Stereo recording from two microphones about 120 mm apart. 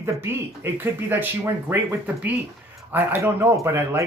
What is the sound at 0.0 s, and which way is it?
Speech, 20° right (ahead or behind).